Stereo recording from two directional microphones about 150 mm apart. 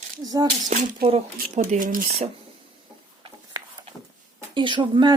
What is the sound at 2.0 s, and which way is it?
Speech, 45° right (ahead or behind).